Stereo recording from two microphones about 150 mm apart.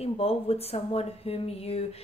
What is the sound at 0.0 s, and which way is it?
Speech, 40° left (ahead or behind).